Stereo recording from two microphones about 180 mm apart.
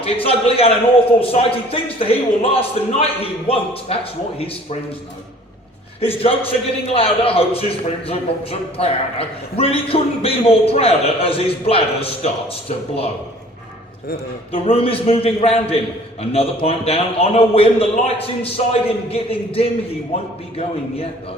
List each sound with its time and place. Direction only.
0.0 s a man's voice: 30° left (ahead or behind)
6.0 s a man's voice: 30° left (ahead or behind)
14.5 s a man's voice: 30° left (ahead or behind)